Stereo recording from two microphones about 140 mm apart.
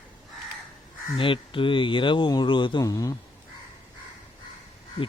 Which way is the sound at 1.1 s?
40° left (ahead or behind).